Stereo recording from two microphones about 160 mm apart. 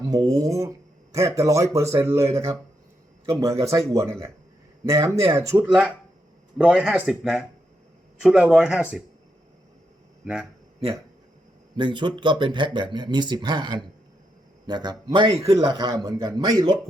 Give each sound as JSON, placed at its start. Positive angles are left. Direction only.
{"t": 0.0, "sound": "speech", "side_deg": -20}
{"t": 4.9, "sound": "speech", "side_deg": -20}
{"t": 6.6, "sound": "speech", "side_deg": -5}
{"t": 11.8, "sound": "speech", "side_deg": -30}